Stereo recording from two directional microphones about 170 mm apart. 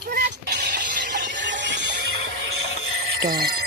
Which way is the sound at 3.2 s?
65° right (ahead or behind).